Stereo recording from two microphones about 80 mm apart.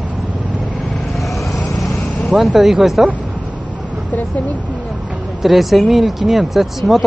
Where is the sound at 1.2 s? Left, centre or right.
Centre.